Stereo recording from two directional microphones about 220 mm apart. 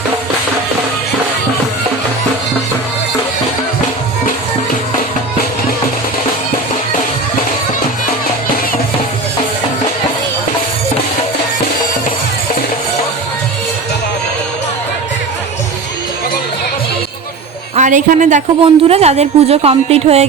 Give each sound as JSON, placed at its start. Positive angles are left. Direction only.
{"t": 17.7, "sound": "a woman's voice", "side_deg": -35}